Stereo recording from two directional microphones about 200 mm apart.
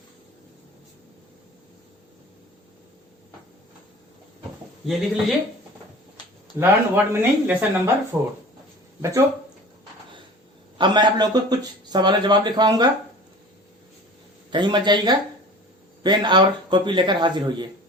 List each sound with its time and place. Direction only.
6.6 s speech: 10° right (ahead or behind)
10.8 s speech: 20° right (ahead or behind)
14.5 s speech: 20° right (ahead or behind)